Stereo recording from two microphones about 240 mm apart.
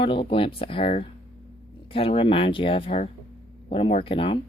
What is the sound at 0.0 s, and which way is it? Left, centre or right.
Speech, left.